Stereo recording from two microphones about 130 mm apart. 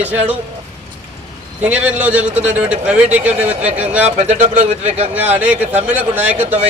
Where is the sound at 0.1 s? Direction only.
10° right (ahead or behind).